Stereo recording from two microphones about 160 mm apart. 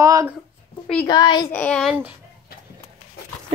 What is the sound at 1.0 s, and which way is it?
Speech, 25° left (ahead or behind).